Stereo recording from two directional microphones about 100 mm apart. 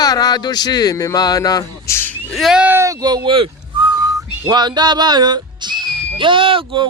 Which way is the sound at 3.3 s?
55° right (ahead or behind).